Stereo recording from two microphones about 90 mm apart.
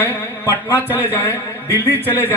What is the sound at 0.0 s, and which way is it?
A man's voice, 25° left (ahead or behind).